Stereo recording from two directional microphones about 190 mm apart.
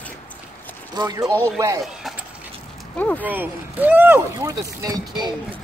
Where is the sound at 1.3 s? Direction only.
10° left (ahead or behind).